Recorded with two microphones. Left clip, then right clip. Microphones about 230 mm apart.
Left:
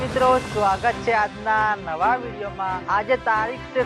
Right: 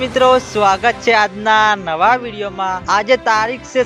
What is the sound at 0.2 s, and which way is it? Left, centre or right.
Music, right.